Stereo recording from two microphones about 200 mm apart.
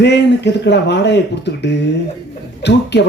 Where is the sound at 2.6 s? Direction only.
60° left (ahead or behind).